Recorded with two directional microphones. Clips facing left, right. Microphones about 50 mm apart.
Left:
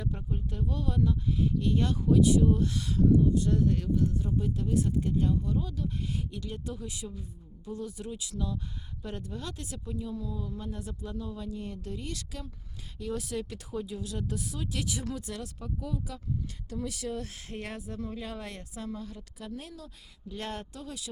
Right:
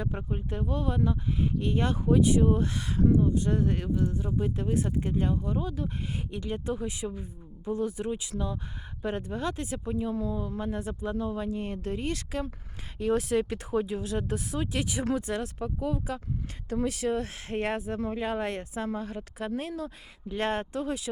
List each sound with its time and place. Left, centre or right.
0.0 s speech: right